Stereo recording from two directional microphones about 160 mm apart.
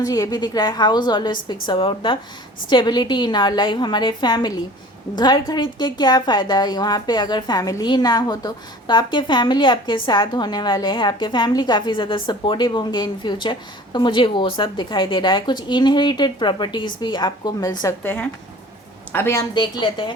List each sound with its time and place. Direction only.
0.0 s a woman's voice: 20° left (ahead or behind)